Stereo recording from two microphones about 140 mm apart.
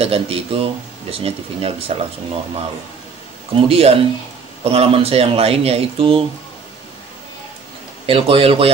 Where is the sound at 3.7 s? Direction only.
45° right (ahead or behind).